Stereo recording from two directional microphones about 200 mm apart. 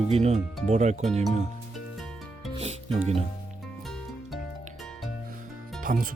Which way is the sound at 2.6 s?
30° right (ahead or behind).